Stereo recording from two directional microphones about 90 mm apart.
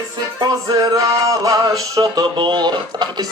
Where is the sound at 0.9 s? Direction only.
40° right (ahead or behind).